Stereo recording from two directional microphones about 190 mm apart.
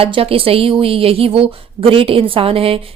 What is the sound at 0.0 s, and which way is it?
A woman's voice, 30° right (ahead or behind).